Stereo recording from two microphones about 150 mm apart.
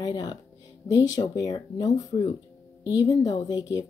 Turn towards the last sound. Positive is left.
turn(degrees=25)  # may be behind; listen again after turning